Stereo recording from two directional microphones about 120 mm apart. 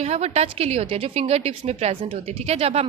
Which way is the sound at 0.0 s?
60° right (ahead or behind).